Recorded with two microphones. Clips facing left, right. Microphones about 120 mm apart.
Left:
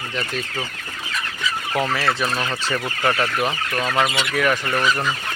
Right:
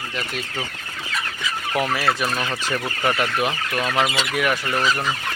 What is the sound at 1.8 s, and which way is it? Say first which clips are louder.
Speech: even; 10° right (ahead or behind).